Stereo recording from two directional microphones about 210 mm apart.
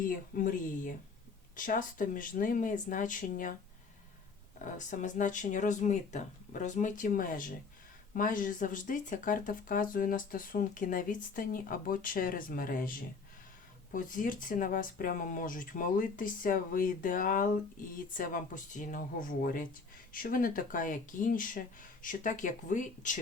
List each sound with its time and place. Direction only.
0.0 s speech: 40° left (ahead or behind)
4.6 s speech: 35° left (ahead or behind)